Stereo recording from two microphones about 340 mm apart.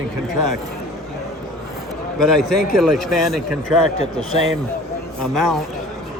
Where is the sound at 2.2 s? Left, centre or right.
Centre.